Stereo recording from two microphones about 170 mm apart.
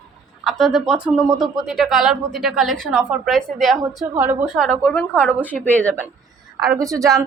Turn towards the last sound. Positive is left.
turn(degrees=-20)  # may be behind; listen again after turning